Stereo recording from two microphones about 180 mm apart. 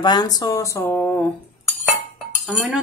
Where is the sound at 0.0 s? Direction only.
25° left (ahead or behind).